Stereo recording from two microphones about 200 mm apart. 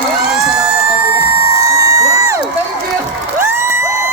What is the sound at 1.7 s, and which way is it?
Crowd, 15° right (ahead or behind).